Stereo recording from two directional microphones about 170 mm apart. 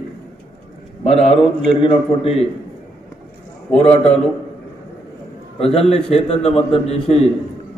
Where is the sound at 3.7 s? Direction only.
40° left (ahead or behind).